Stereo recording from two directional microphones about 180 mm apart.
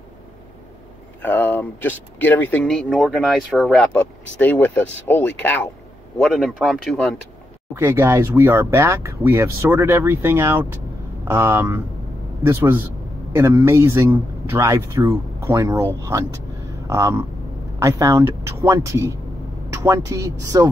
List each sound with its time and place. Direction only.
1.2 s speech: 10° left (ahead or behind)
7.7 s speech: 10° right (ahead or behind)